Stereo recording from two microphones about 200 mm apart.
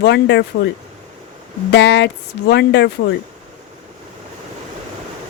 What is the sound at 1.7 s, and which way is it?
Speech, 60° left (ahead or behind).